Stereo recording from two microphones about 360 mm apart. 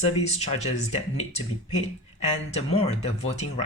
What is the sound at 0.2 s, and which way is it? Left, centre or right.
Speech, centre.